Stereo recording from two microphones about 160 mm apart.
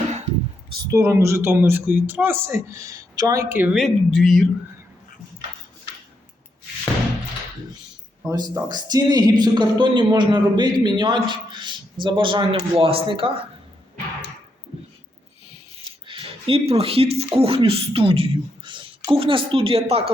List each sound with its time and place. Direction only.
0.9 s speech: 20° right (ahead or behind); by 4.4 s centre (ahead or behind)
8.3 s a man's voice: 25° right (ahead or behind)
15.8 s speech: 35° right (ahead or behind)